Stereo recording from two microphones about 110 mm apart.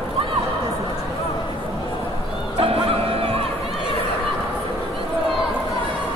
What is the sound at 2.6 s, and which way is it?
Music, 60° right (ahead or behind).